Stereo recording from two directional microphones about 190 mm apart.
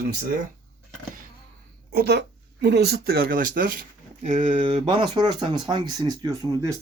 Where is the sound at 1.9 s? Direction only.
60° right (ahead or behind); by 4.6 s 40° right (ahead or behind).